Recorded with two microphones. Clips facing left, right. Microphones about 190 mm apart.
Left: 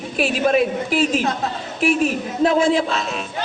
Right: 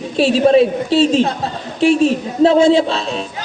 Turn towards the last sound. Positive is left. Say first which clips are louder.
# right 5 dB
turn(degrees=-30)  # may be behind; listen again after turning